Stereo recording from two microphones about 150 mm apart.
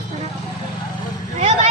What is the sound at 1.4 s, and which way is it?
Speech, 50° right (ahead or behind).